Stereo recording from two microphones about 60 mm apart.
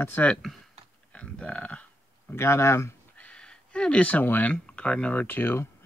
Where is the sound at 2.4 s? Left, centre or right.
Left.